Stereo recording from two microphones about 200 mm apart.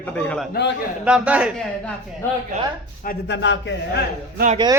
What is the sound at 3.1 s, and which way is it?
Speech, 60° left (ahead or behind).